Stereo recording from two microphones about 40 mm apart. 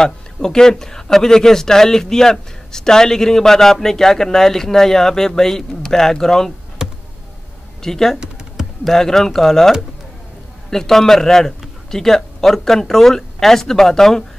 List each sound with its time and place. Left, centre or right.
0.0 s a man's voice: centre
6.8 s a sound: centre
7.8 s a man's voice: centre